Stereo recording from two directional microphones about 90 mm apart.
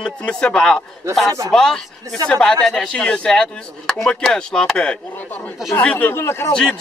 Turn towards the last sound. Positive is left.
turn(degrees=30)  # may be behind; listen again after turning